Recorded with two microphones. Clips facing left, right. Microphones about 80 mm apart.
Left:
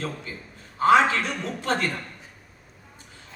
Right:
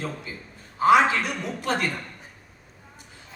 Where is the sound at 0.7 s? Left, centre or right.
Centre.